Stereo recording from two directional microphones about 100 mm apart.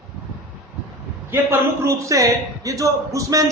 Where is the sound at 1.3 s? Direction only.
25° right (ahead or behind).